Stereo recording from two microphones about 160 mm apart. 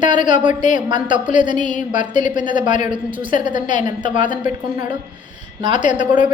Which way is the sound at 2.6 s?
50° left (ahead or behind).